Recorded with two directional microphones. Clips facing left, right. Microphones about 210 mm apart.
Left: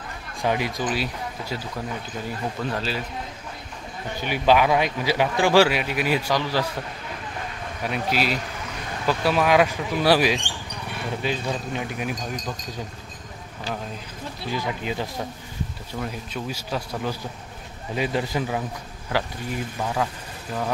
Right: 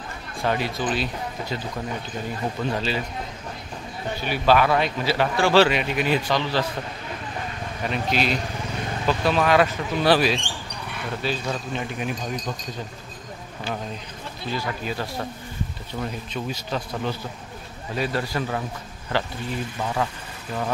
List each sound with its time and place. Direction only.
0.4 s a man's voice: 15° left (ahead or behind)
2.7 s a man's voice: centre (ahead or behind)
4.2 s a man's voice: 15° left (ahead or behind)
7.8 s a man's voice: 5° left (ahead or behind)
14.4 s a man's voice: 15° left (ahead or behind)
15.9 s a man's voice: 5° left (ahead or behind)